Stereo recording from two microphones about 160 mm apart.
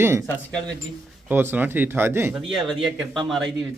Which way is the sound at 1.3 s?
10° right (ahead or behind).